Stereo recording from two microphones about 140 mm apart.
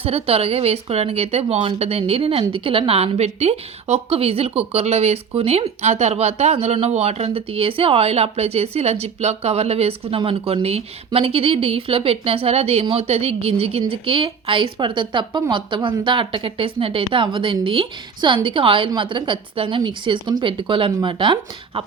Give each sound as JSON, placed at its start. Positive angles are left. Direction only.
{"t": 0.0, "sound": "a woman's voice", "side_deg": -45}